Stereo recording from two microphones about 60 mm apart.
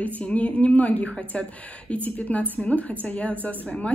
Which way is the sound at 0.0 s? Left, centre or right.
Left.